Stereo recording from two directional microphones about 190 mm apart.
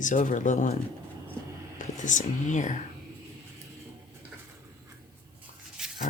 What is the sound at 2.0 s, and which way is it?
Speech, 40° left (ahead or behind).